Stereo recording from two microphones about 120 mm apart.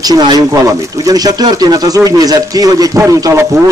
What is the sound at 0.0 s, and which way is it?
Speech, 35° right (ahead or behind).